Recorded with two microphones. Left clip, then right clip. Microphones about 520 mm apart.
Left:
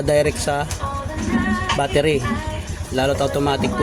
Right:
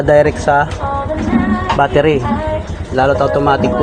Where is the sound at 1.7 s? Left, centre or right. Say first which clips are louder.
Right 8 dB; left.